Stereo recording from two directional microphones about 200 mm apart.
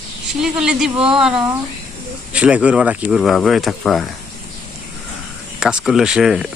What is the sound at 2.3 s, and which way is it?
Speech, 5° right (ahead or behind).